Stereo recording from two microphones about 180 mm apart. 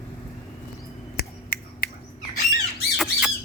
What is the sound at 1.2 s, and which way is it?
Finger snapping, 55° left (ahead or behind).